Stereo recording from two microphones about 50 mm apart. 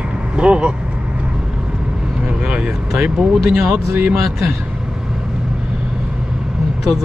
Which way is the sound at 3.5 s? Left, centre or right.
Centre.